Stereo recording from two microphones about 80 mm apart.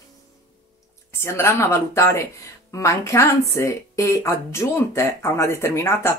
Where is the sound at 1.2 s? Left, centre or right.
Left.